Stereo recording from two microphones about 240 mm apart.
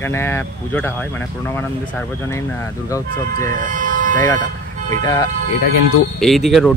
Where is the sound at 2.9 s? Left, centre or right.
Centre.